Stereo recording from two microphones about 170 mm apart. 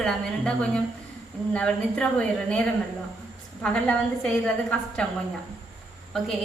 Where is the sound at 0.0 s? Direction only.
5° left (ahead or behind).